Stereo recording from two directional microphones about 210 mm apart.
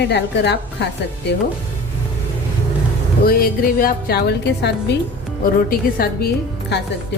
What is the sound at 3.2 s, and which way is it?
A woman's voice, 45° left (ahead or behind).